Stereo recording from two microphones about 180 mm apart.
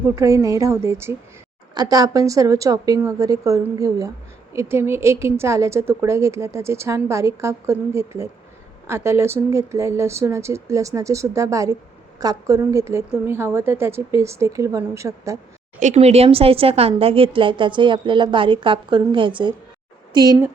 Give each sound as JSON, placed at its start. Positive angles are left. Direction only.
{"t": 0.2, "sound": "a woman's voice", "side_deg": -15}
{"t": 15.8, "sound": "a woman's voice", "side_deg": -40}